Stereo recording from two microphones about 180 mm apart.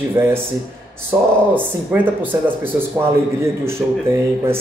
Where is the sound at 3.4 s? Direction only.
15° right (ahead or behind).